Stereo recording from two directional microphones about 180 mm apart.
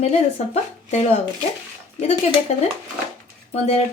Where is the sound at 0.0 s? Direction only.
35° left (ahead or behind).